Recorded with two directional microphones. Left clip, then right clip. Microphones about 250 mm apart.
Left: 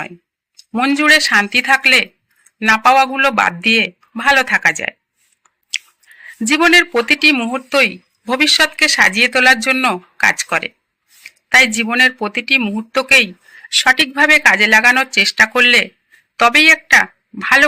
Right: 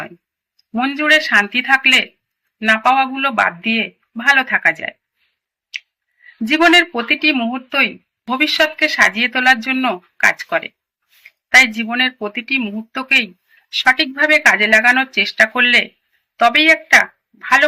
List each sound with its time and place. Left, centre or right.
0.8 s speech: left
6.7 s speech: left